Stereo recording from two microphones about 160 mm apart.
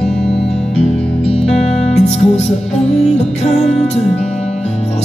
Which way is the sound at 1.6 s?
45° left (ahead or behind).